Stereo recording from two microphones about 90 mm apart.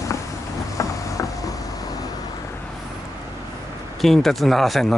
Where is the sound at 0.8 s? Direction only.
40° left (ahead or behind).